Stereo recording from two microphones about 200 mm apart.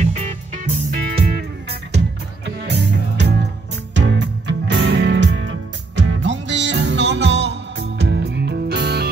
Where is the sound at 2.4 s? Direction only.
60° right (ahead or behind).